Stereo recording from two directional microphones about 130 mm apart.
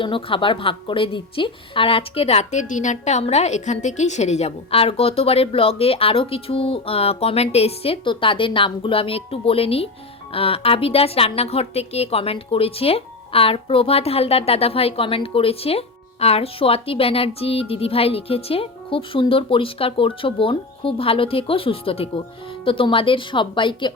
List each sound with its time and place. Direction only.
0.0 s a woman's voice: 40° left (ahead or behind)